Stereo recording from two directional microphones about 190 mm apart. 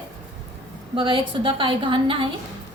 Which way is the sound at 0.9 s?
25° right (ahead or behind).